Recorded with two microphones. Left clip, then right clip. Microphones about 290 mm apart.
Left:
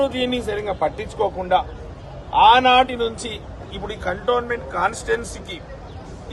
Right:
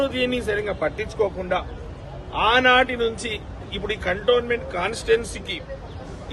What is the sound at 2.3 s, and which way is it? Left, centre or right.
A man's voice, left.